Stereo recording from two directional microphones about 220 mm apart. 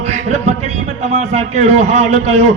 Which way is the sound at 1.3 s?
30° right (ahead or behind).